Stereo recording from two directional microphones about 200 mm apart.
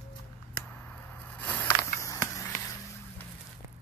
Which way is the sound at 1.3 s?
10° left (ahead or behind).